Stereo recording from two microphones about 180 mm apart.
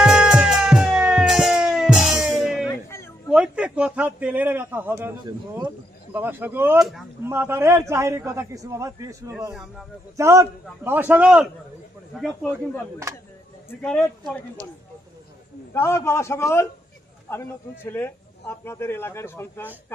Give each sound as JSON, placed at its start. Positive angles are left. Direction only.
{"t": 0.0, "sound": "music", "side_deg": -5}
{"t": 2.6, "sound": "a sound", "side_deg": 15}
{"t": 3.2, "sound": "a man's voice", "side_deg": -5}
{"t": 6.1, "sound": "a man's voice", "side_deg": -10}
{"t": 9.5, "sound": "speech", "side_deg": 0}
{"t": 10.2, "sound": "a man's voice", "side_deg": -15}
{"t": 12.2, "sound": "speech", "side_deg": 5}
{"t": 15.7, "sound": "a man's voice", "side_deg": 15}